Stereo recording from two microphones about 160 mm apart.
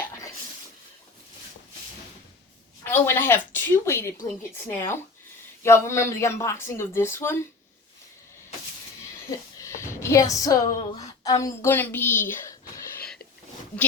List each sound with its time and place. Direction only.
2.8 s speech: 15° left (ahead or behind)
9.6 s a sound: 20° left (ahead or behind)
11.2 s speech: 20° left (ahead or behind)